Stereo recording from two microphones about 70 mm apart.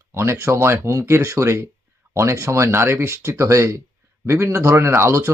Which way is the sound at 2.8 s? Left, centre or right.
Right.